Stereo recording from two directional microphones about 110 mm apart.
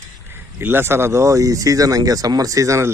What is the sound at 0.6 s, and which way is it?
Speech, 20° right (ahead or behind).